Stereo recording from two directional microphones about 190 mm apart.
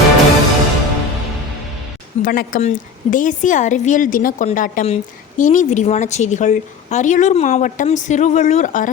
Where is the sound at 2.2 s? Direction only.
45° left (ahead or behind).